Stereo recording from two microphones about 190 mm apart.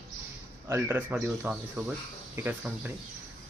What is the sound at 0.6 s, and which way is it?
Speech, 10° right (ahead or behind).